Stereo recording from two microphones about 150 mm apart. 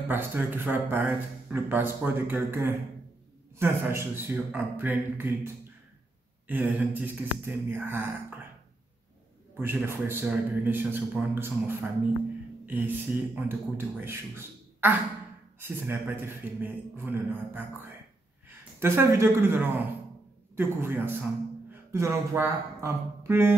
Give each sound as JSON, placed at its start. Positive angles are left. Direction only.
{"t": 0.1, "sound": "speech", "side_deg": -15}
{"t": 9.6, "sound": "speech", "side_deg": -15}